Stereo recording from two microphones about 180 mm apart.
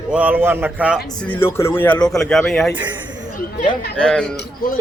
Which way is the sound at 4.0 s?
5° left (ahead or behind).